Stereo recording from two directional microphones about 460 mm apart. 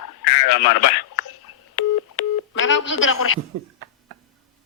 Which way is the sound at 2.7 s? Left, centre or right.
Left.